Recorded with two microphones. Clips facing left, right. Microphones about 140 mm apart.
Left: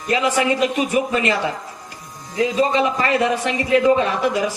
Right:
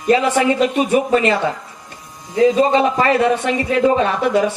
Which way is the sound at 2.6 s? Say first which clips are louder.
Right 4 dB; 35° right (ahead or behind).